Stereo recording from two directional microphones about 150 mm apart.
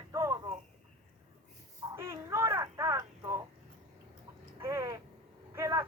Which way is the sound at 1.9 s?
15° right (ahead or behind).